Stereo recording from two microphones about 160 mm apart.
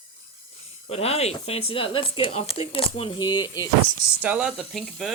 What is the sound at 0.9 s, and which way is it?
Speech, 40° left (ahead or behind).